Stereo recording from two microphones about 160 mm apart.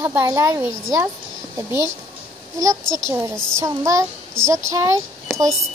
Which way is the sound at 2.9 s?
20° right (ahead or behind).